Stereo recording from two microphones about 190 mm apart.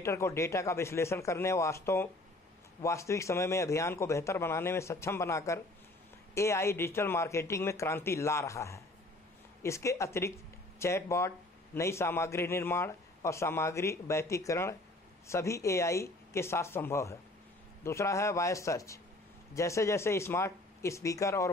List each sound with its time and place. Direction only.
0.0 s speech: 15° left (ahead or behind)